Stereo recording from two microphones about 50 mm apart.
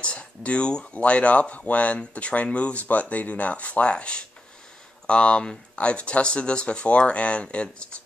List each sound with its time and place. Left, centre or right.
0.0 s speech: left